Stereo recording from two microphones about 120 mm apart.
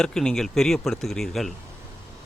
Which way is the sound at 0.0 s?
5° left (ahead or behind).